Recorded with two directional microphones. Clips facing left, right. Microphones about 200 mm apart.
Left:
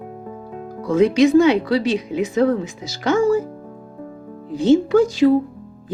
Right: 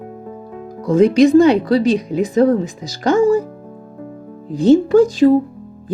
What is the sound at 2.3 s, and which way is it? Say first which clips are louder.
Speech: right 4 dB; 35° right (ahead or behind).